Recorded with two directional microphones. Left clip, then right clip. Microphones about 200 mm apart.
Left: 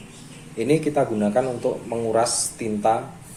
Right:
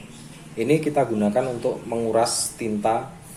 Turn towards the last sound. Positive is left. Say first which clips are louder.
# left 2 dB
turn(degrees=5)  # may be behind; listen again after turning